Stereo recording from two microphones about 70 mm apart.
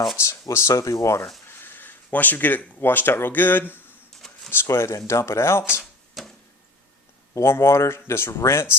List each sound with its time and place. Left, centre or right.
0.2 s speech: left
1.5 s speech: left
4.2 s a sound: centre
4.6 s speech: left
6.2 s a sound: centre
7.3 s speech: left